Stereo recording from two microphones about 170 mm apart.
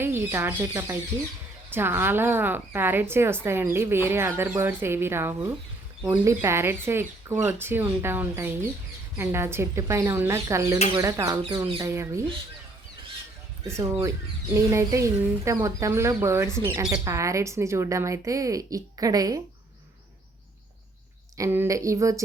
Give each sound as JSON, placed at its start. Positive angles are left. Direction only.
{"t": 0.0, "sound": "a woman's voice", "side_deg": -15}
{"t": 14.5, "sound": "a woman's voice", "side_deg": -15}
{"t": 21.3, "sound": "speech", "side_deg": -15}